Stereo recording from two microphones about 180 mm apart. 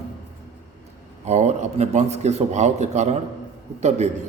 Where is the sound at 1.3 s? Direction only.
40° right (ahead or behind).